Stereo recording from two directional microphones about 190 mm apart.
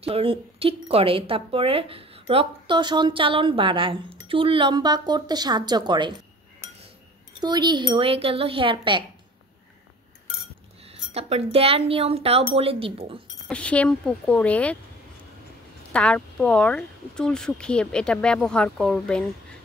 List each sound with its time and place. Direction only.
0.0 s speech: 30° right (ahead or behind)
7.3 s speech: 20° right (ahead or behind)
10.9 s speech: 35° right (ahead or behind)
13.5 s speech: 5° left (ahead or behind)
15.9 s speech: 5° left (ahead or behind)